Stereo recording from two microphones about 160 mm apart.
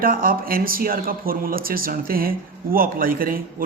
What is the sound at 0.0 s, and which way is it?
Speech, 65° right (ahead or behind).